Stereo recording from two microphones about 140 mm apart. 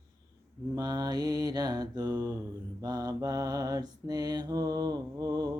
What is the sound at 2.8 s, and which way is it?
Mantra, 25° right (ahead or behind).